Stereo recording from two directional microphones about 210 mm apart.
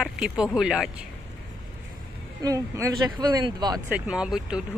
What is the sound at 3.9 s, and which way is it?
Speech, 5° right (ahead or behind).